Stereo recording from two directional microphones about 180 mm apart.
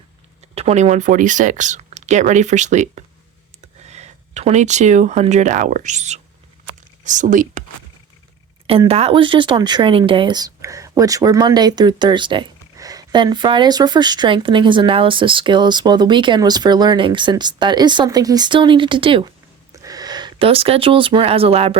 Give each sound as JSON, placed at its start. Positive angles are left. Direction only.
{"t": 0.5, "sound": "speech", "side_deg": -35}
{"t": 8.6, "sound": "speech", "side_deg": -30}